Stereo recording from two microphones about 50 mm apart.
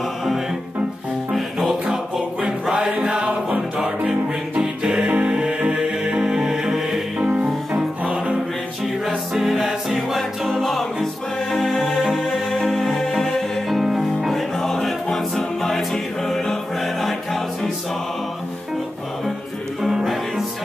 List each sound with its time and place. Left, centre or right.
1.3 s music: centre
2.7 s music: centre
7.2 s music: right
9.0 s music: centre
11.8 s music: centre
12.5 s music: centre
14.6 s music: centre
19.8 s music: centre